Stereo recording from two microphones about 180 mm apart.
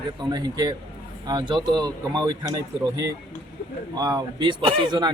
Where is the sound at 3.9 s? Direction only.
20° right (ahead or behind).